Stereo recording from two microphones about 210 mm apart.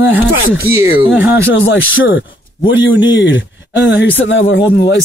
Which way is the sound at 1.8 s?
65° left (ahead or behind).